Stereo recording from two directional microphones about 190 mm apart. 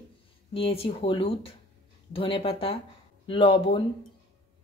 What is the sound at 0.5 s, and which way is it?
Speech, 30° left (ahead or behind).